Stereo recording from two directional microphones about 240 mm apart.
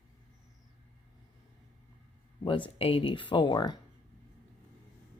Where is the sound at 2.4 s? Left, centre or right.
Left.